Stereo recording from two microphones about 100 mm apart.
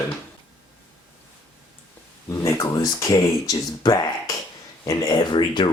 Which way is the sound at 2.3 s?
30° left (ahead or behind).